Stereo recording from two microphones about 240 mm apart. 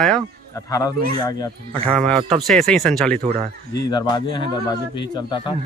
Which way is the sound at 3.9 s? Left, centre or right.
Centre.